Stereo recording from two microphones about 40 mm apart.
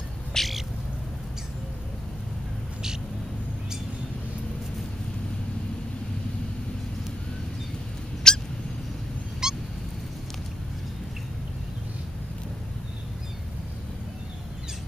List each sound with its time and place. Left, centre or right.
0.3 s cat: centre
8.3 s cat: centre
9.4 s a sound: centre